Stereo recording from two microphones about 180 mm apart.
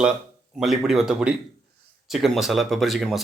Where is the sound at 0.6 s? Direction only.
Centre (ahead or behind).